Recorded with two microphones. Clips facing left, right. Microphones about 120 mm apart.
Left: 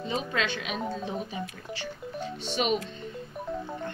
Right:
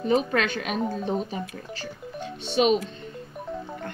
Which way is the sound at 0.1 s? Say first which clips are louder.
Right 8 dB; 50° right (ahead or behind).